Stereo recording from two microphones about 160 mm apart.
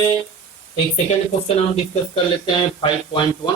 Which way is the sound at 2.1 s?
30° left (ahead or behind).